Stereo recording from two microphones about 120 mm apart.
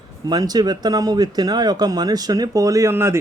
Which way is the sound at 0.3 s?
35° right (ahead or behind).